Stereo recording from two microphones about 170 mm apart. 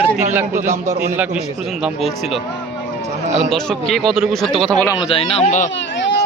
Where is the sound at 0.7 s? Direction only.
45° right (ahead or behind).